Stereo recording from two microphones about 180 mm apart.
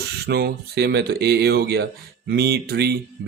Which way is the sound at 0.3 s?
65° right (ahead or behind).